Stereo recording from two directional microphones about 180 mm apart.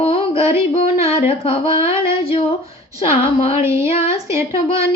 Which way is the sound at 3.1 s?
30° left (ahead or behind).